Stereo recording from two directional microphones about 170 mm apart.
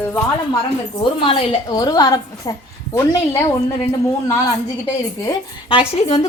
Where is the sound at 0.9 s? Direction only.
30° left (ahead or behind).